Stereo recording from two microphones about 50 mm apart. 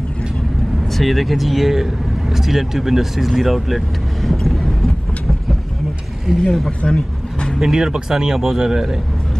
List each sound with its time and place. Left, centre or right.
0.9 s speech: centre
6.3 s speech: centre
6.8 s speech: left
7.5 s speech: centre